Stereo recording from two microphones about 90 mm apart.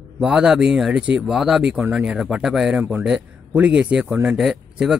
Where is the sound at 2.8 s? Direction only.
20° right (ahead or behind).